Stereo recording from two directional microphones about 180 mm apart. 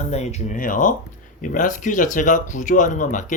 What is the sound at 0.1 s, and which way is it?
Speech, 40° left (ahead or behind).